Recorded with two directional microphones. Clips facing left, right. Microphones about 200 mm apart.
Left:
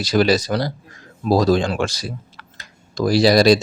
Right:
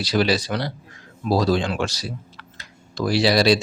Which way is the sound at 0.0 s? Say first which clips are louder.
Left 4 dB; 45° left (ahead or behind).